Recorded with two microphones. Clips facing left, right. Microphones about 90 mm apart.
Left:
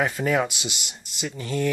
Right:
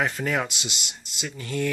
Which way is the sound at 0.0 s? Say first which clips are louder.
Left 3 dB; 15° left (ahead or behind).